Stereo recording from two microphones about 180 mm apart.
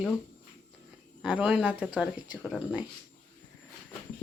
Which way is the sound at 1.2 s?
5° right (ahead or behind).